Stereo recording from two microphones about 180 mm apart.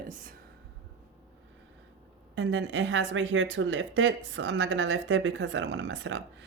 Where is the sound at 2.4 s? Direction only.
85° right.